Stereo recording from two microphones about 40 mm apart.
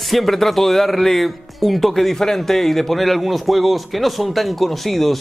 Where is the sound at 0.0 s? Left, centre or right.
Centre.